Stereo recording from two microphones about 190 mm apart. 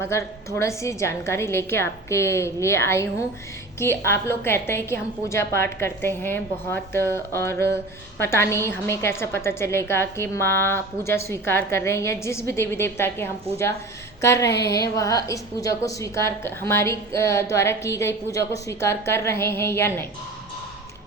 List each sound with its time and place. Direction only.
0.0 s a woman's voice: 15° left (ahead or behind)